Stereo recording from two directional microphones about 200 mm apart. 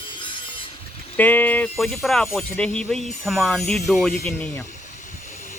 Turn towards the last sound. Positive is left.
turn(degrees=10)  # may be behind; listen again after turning